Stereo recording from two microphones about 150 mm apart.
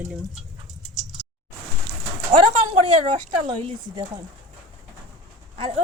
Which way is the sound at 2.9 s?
45° right (ahead or behind).